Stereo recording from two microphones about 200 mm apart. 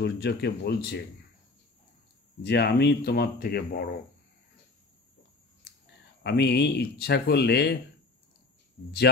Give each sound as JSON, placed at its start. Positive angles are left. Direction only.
{"t": 0.0, "sound": "speech", "side_deg": 55}
{"t": 2.4, "sound": "speech", "side_deg": 55}
{"t": 6.2, "sound": "speech", "side_deg": 60}